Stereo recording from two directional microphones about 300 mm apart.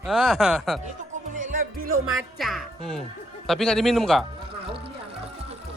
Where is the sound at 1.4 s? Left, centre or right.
Right.